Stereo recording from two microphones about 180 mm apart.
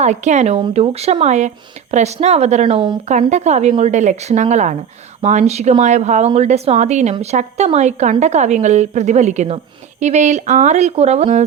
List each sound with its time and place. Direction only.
0.0 s speech: 40° right (ahead or behind)
3.1 s speech: 40° right (ahead or behind)